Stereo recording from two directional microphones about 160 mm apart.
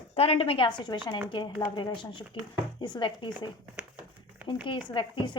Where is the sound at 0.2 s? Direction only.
35° left (ahead or behind).